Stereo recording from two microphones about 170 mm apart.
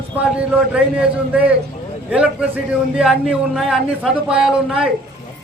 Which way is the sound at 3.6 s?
Centre (ahead or behind).